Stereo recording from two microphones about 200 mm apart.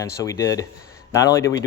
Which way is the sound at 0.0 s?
15° left (ahead or behind).